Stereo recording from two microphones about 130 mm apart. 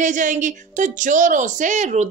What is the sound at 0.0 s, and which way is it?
A woman's voice, 75° right (ahead or behind).